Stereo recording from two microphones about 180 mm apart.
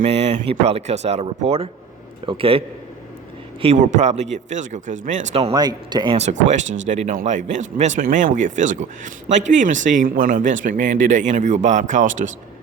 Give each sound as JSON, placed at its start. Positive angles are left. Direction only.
{"t": 0.0, "sound": "speech", "side_deg": -35}
{"t": 5.5, "sound": "speech", "side_deg": -25}
{"t": 6.1, "sound": "speech", "side_deg": -40}